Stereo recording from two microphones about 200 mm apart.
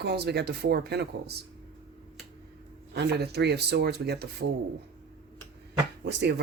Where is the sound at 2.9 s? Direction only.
55° right (ahead or behind).